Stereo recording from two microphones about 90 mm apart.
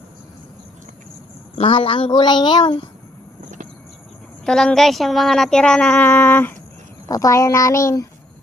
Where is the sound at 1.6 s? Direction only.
85° left.